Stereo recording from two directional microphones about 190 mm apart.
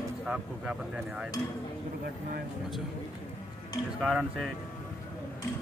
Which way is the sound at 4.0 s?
5° right (ahead or behind).